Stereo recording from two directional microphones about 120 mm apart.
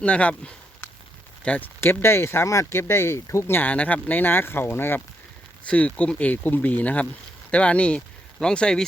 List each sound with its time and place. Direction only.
0.0 s speech: 10° left (ahead or behind)